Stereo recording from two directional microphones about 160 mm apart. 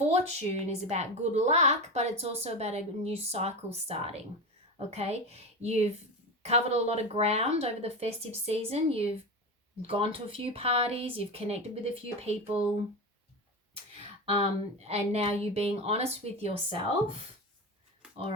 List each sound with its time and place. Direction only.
0.1 s a woman's voice: 45° right (ahead or behind)
14.8 s speech: 40° right (ahead or behind)